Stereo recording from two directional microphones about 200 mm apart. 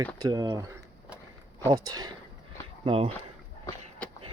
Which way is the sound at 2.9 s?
30° right (ahead or behind).